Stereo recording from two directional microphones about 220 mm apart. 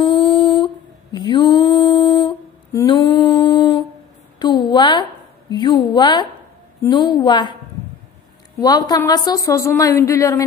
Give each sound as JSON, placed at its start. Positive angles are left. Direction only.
{"t": 0.0, "sound": "humming", "side_deg": 20}
{"t": 1.1, "sound": "a sound", "side_deg": 20}
{"t": 5.5, "sound": "a woman's voice", "side_deg": 20}
{"t": 8.5, "sound": "a woman's voice", "side_deg": 15}